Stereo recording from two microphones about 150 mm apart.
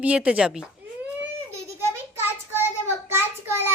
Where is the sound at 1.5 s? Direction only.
15° right (ahead or behind).